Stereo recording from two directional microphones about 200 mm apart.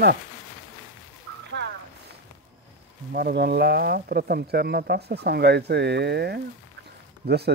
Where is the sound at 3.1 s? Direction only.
50° right (ahead or behind).